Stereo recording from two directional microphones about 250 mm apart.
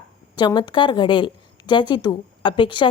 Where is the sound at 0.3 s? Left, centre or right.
Centre.